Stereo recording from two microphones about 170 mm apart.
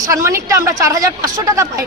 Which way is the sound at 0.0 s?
20° right (ahead or behind).